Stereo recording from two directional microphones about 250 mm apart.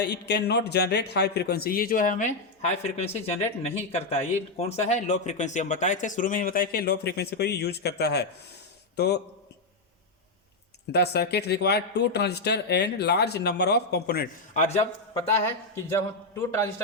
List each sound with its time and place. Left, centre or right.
0.0 s a man's voice: left
10.9 s a man's voice: left
15.7 s a man's voice: centre